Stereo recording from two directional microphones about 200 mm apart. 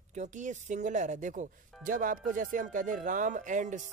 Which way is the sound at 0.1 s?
35° right (ahead or behind).